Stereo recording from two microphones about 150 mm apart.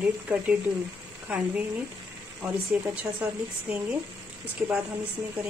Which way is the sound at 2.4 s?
10° right (ahead or behind).